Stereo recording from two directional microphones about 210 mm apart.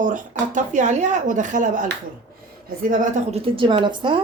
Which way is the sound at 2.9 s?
40° right (ahead or behind).